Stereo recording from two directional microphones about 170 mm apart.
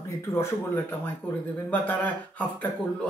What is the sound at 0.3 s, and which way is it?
A man's voice, 15° left (ahead or behind).